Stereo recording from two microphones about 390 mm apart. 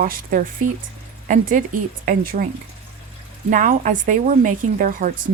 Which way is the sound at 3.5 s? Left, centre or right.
Centre.